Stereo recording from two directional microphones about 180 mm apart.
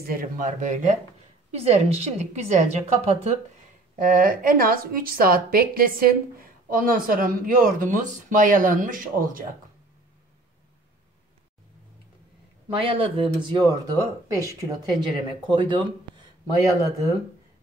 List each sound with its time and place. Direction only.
0.0 s a woman's voice: 55° right (ahead or behind); by 3.2 s 40° right (ahead or behind)
4.1 s a woman's voice: 50° right (ahead or behind)
12.7 s speech: 30° right (ahead or behind)